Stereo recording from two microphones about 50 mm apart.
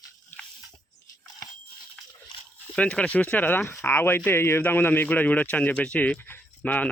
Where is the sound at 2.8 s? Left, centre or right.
Left.